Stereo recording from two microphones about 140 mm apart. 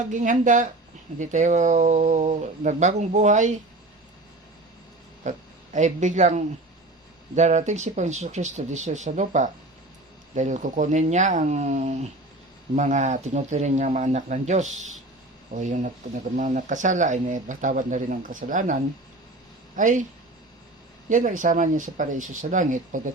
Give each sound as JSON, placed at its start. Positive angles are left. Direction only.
{"t": 0.1, "sound": "speech", "side_deg": -65}
{"t": 5.2, "sound": "speech", "side_deg": -55}
{"t": 21.1, "sound": "speech", "side_deg": -65}